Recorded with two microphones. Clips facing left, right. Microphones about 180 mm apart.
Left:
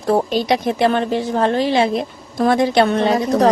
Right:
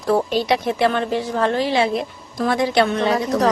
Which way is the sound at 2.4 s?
45° left (ahead or behind).